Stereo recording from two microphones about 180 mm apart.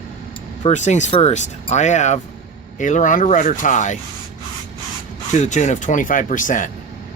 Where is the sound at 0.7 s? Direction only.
40° left (ahead or behind).